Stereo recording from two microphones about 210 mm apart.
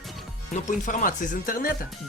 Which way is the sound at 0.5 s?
35° left (ahead or behind).